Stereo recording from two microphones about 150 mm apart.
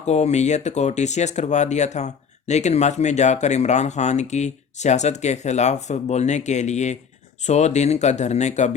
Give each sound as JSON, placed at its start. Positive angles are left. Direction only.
{"t": 0.0, "sound": "speech", "side_deg": 45}